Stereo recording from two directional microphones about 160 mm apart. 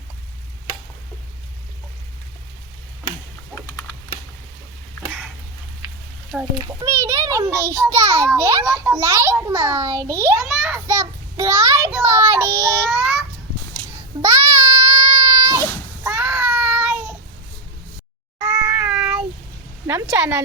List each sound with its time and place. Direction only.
5.0 s a sound: 10° right (ahead or behind)
6.4 s a child's voice: 25° right (ahead or behind)
10.4 s a child's voice: 5° right (ahead or behind)
10.8 s a child's voice: 15° right (ahead or behind)
12.9 s child singing: 5° right (ahead or behind)
14.2 s a sound: 20° right (ahead or behind)
16.0 s child singing: 10° right (ahead or behind)
18.4 s cat: 20° right (ahead or behind)
18.9 s child singing: 5° right (ahead or behind)
19.9 s a child's voice: 10° right (ahead or behind)